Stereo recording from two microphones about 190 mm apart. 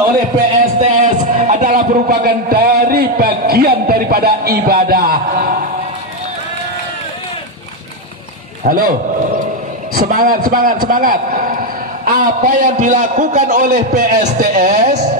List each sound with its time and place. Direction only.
0.7 s music: 35° right (ahead or behind)
8.6 s a man's voice: 45° right (ahead or behind)
9.9 s a man's voice: 50° right (ahead or behind)